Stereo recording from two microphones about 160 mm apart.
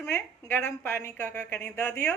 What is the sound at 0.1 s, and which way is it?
A woman's voice, 15° left (ahead or behind).